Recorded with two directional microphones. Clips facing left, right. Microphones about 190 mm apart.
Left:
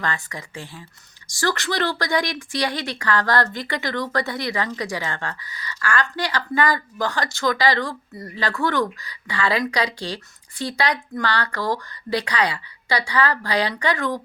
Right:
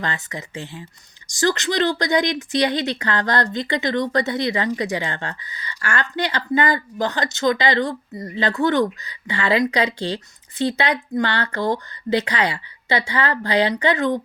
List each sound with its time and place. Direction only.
0.0 s speech: 25° right (ahead or behind)